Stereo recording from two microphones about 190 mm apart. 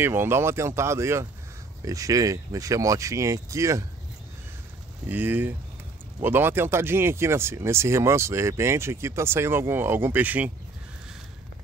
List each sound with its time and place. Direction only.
0.0 s speech: 10° right (ahead or behind)
5.0 s speech: 10° right (ahead or behind)